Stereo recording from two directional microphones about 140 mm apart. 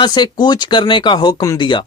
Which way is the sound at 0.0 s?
30° left (ahead or behind).